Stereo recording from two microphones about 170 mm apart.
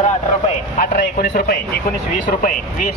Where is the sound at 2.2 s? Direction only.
55° left (ahead or behind).